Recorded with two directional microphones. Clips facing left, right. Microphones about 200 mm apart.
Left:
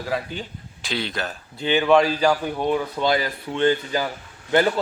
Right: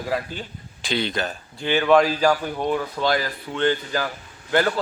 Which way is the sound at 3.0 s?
20° left (ahead or behind).